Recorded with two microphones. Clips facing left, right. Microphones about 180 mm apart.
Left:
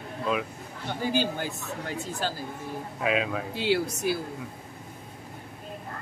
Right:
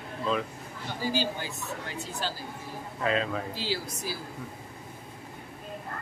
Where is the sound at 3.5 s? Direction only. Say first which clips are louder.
Left 7 dB; 65° left (ahead or behind).